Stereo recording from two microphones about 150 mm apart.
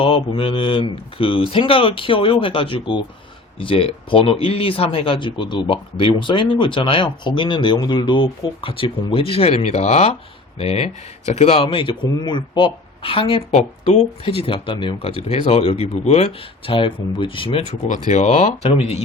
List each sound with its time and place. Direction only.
0.0 s speech: 35° left (ahead or behind)
17.7 s speech: 55° left (ahead or behind)